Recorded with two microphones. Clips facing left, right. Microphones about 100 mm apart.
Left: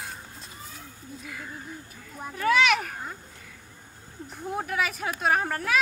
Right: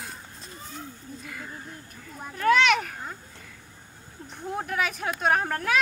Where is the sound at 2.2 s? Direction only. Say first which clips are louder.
Right 2 dB; centre (ahead or behind).